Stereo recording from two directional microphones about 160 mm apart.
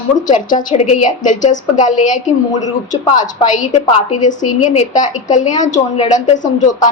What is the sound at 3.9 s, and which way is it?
A woman's voice, 45° left (ahead or behind).